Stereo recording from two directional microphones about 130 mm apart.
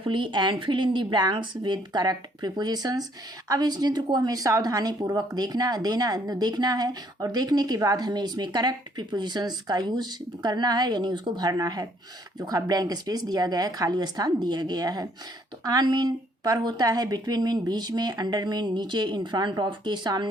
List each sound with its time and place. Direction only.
0.0 s speech: 40° right (ahead or behind)